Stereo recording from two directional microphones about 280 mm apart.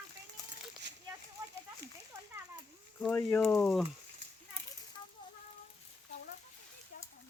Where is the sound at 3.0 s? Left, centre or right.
Centre.